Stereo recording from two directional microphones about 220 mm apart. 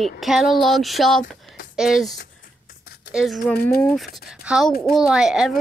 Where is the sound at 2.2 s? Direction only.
40° left (ahead or behind).